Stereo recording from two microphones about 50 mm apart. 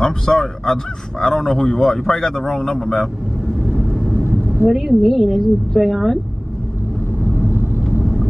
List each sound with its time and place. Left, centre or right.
0.0 s a man's voice: centre
3.7 s vehicle: centre
4.6 s a woman's voice: centre
5.0 s a woman's voice: centre
7.4 s vehicle: right
8.0 s vehicle: centre